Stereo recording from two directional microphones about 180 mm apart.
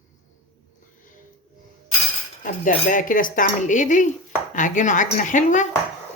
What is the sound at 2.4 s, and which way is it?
Speech, 50° left (ahead or behind).